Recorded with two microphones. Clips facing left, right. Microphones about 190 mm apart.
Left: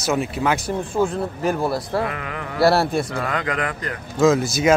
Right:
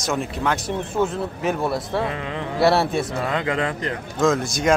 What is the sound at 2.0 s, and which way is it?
Speech, 25° right (ahead or behind).